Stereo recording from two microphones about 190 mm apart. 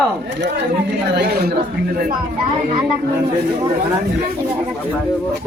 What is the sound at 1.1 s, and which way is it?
Speech, 55° right (ahead or behind).